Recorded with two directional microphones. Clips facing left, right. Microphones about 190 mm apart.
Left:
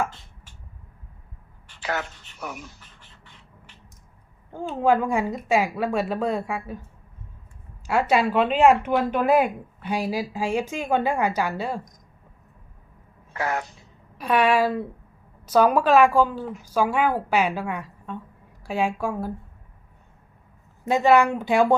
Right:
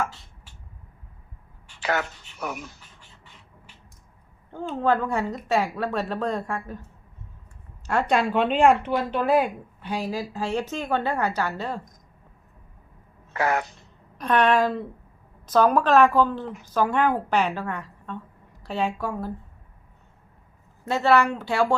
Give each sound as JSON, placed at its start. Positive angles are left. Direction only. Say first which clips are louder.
{"t": 1.8, "sound": "speech", "louder": "right 3 dB", "side_deg": -70}
{"t": 4.5, "sound": "speech", "louder": "left 2 dB", "side_deg": 10}
{"t": 7.9, "sound": "speech", "louder": "left 2 dB", "side_deg": 5}
{"t": 13.3, "sound": "speech", "louder": "right 3 dB", "side_deg": -75}
{"t": 13.7, "sound": "a sound", "louder": "even", "side_deg": 10}
{"t": 15.4, "sound": "speech", "louder": "left 1 dB", "side_deg": 10}
{"t": 20.8, "sound": "speech", "louder": "left 2 dB", "side_deg": 15}